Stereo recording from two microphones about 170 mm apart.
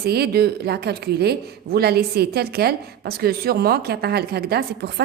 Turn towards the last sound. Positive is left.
turn(degrees=-65)  # may be behind; listen again after turning